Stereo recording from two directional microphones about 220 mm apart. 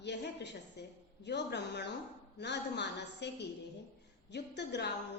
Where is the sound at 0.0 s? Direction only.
50° left (ahead or behind).